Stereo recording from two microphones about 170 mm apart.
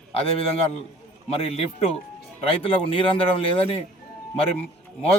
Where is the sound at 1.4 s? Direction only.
35° left (ahead or behind).